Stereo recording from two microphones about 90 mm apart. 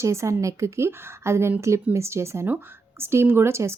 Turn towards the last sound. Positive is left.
turn(degrees=-30)  # may be behind; listen again after turning